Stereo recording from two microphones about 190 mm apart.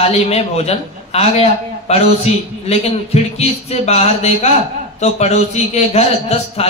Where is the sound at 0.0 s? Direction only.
35° left (ahead or behind).